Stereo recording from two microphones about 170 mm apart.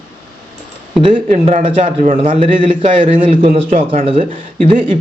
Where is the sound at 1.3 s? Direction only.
45° right (ahead or behind).